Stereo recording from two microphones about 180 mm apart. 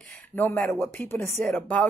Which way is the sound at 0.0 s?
10° left (ahead or behind).